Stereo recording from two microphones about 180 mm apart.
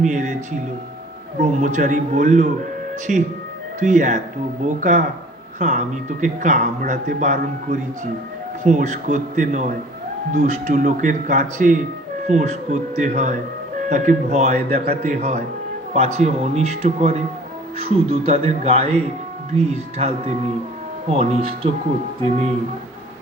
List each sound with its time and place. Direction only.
0.0 s a man's voice: 45° right (ahead or behind)